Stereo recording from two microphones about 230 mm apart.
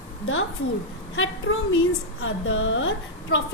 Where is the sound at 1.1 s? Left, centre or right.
Left.